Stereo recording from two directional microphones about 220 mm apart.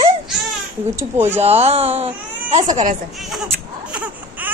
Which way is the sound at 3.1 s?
Centre (ahead or behind).